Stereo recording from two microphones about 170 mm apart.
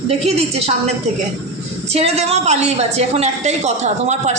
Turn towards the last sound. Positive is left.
turn(degrees=-45)  # may be behind; listen again after turning